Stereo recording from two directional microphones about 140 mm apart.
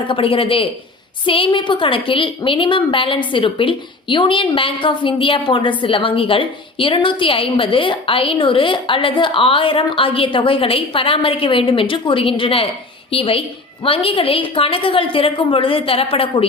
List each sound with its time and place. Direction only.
0.1 s a woman's voice: 40° left (ahead or behind)